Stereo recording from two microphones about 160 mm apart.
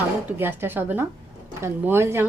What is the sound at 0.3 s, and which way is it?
A woman's voice, 15° right (ahead or behind).